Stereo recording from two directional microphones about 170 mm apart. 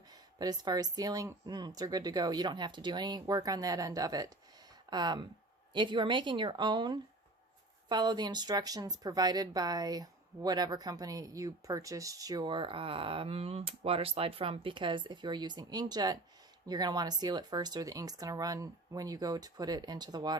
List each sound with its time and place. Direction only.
0.1 s a woman's voice: 25° right (ahead or behind)